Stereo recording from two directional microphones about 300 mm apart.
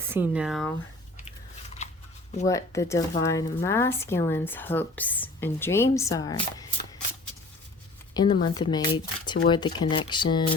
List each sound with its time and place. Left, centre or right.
0.1 s speech: centre
2.5 s speech: centre
8.1 s speech: centre